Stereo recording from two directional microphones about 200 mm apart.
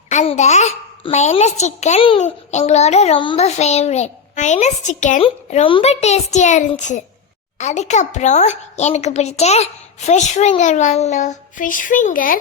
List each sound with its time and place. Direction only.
0.1 s a child's voice: 35° left (ahead or behind)